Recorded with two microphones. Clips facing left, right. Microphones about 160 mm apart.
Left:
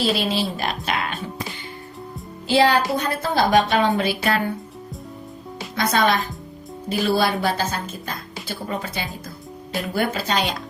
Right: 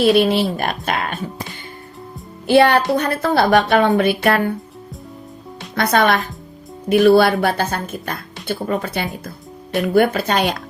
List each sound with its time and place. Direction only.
0.0 s speech: 60° right (ahead or behind)
2.5 s a woman's voice: 60° right (ahead or behind)
5.7 s a woman's voice: 65° right (ahead or behind)